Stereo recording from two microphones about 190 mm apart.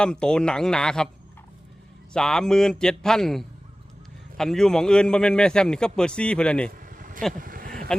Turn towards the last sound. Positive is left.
turn(degrees=-50)  # may be behind; listen again after turning